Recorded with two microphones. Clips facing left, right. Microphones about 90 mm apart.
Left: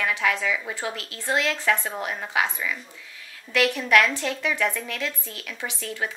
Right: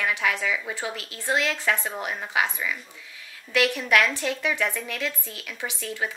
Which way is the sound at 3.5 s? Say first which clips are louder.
Left 2 dB; 15° right (ahead or behind).